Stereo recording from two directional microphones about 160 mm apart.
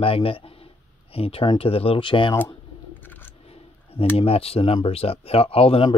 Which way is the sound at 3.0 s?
10° left (ahead or behind).